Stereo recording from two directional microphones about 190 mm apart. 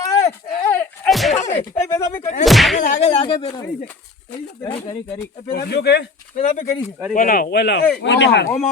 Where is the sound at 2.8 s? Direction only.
40° left (ahead or behind); by 5.2 s 20° left (ahead or behind).